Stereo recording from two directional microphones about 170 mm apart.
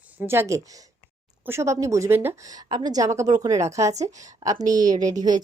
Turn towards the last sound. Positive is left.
turn(degrees=-20)  # may be behind; listen again after turning